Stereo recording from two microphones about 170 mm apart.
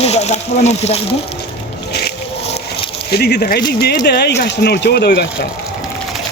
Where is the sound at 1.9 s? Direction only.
70° left (ahead or behind).